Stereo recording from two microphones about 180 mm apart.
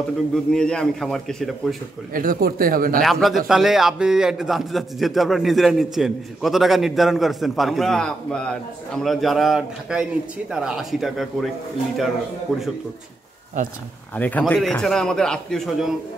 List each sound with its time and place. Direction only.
0.5 s a man's voice: 5° left (ahead or behind)
2.1 s speech: 50° right (ahead or behind)
3.0 s a man's voice: centre (ahead or behind)
14.1 s a man's voice: 10° left (ahead or behind)